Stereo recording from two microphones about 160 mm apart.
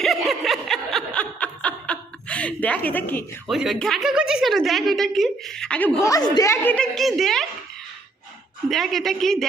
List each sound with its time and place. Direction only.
0.0 s snicker: centre (ahead or behind)
3.4 s a woman's voice: centre (ahead or behind)
6.0 s speech: 20° left (ahead or behind)
6.7 s a woman's voice: 5° left (ahead or behind)
8.7 s a woman's voice: centre (ahead or behind)